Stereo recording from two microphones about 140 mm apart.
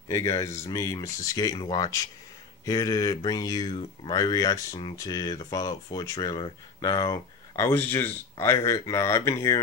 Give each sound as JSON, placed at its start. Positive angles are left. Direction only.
{"t": 0.1, "sound": "speech", "side_deg": 20}